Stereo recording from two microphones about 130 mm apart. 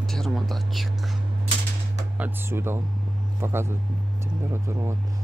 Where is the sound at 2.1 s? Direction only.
15° right (ahead or behind).